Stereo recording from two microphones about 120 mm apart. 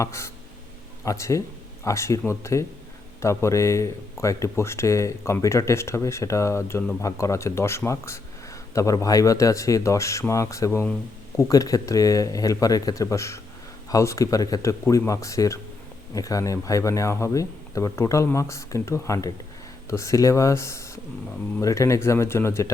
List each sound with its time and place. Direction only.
0.0 s speech: 25° left (ahead or behind)